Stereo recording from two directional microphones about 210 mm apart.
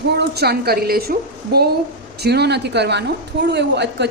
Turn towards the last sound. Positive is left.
turn(degrees=-55)  # may be behind; listen again after turning